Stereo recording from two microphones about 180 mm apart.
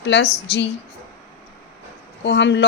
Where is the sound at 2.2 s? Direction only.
75° left (ahead or behind).